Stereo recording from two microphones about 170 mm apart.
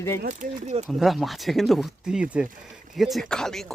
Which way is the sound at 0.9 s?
Centre (ahead or behind).